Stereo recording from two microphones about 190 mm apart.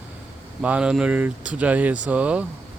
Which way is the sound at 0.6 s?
5° right (ahead or behind).